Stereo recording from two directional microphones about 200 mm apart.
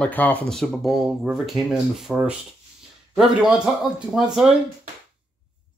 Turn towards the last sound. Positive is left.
turn(degrees=0)  # may be behind; listen again after turning